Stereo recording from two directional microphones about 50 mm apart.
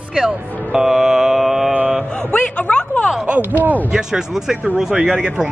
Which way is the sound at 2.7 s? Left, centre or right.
Left.